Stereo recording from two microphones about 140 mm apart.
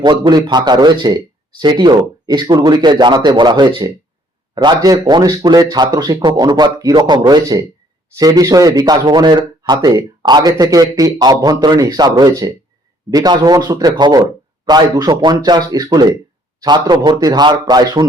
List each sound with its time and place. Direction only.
0.0 s a man's voice: 30° right (ahead or behind)